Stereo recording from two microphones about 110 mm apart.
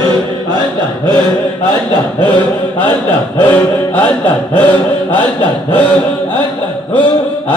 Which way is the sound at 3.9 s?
15° left (ahead or behind).